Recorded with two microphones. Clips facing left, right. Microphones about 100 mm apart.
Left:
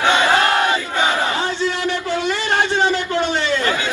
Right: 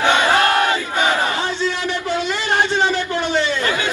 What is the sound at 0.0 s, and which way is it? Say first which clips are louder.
Battle cry: even; 20° left (ahead or behind).